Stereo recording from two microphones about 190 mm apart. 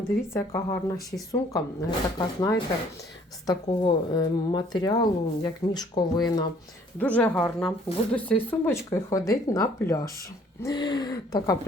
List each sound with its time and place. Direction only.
0.3 s a woman's voice: 15° left (ahead or behind)
7.0 s a woman's voice: 5° left (ahead or behind)